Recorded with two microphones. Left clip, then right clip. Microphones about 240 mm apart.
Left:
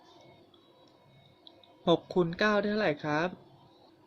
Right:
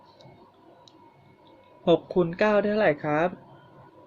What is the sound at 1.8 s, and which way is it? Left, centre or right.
Speech, left.